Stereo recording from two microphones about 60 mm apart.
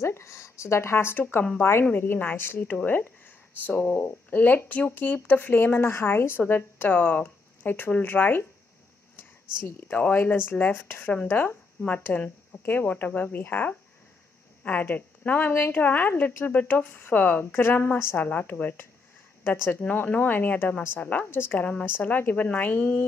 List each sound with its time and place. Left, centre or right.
0.0 s speech: left
1.9 s a woman's voice: left
9.8 s a woman's voice: left
10.3 s a woman's voice: left
15.5 s a woman's voice: left
15.8 s a woman's voice: left